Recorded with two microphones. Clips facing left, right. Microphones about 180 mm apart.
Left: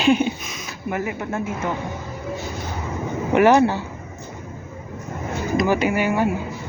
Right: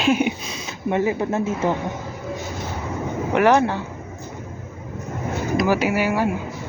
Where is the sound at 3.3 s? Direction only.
5° left (ahead or behind).